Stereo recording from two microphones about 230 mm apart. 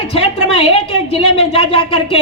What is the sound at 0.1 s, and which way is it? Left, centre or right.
A man's voice, left.